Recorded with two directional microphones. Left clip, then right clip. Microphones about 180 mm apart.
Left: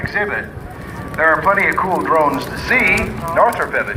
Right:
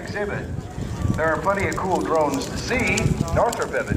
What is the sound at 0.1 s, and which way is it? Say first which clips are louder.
Speech: left 6 dB; 65° right (ahead or behind).